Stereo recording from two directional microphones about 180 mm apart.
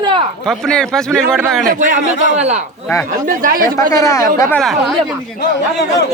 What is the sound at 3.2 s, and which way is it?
Speech, 50° right (ahead or behind).